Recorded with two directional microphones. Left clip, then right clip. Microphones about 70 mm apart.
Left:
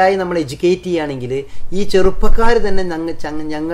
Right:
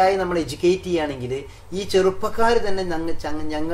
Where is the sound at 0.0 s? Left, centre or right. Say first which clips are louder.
Left 5 dB; left.